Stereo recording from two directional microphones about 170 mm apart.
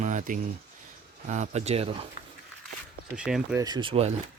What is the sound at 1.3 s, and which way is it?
Speech, 40° right (ahead or behind).